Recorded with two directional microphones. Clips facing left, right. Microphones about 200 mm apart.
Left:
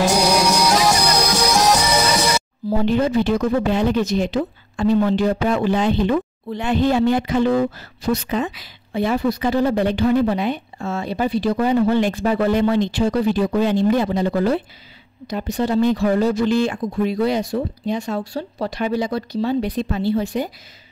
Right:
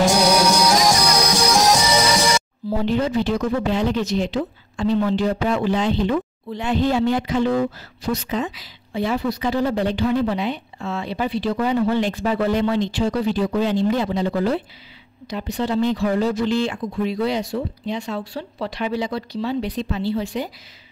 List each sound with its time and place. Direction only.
0.0 s music: centre (ahead or behind)
2.8 s speech: 55° left (ahead or behind)